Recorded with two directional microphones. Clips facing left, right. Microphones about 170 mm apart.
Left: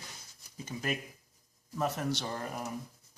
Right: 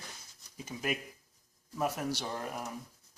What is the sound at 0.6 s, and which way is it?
Speech, 5° right (ahead or behind).